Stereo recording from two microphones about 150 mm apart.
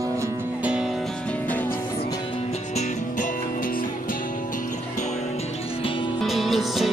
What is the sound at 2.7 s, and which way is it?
Music, 55° left (ahead or behind).